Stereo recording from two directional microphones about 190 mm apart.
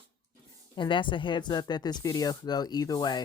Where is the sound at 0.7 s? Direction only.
25° left (ahead or behind).